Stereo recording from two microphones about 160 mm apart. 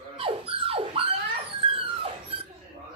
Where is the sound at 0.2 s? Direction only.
35° right (ahead or behind).